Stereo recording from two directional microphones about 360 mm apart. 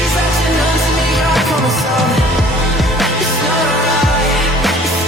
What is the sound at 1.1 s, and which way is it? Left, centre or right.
Music, centre.